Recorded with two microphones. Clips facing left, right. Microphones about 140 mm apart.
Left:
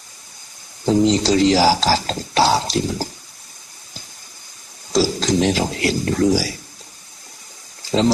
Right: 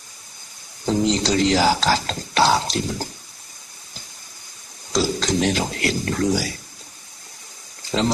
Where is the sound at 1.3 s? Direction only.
35° left (ahead or behind).